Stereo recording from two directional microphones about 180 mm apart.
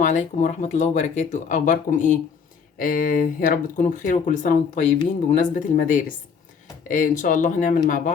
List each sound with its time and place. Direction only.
0.0 s speech: 40° left (ahead or behind)